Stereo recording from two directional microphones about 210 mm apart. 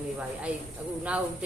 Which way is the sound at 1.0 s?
5° right (ahead or behind).